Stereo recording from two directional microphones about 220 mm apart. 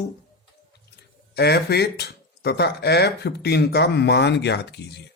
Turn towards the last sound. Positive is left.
turn(degrees=50)  # may be behind; listen again after turning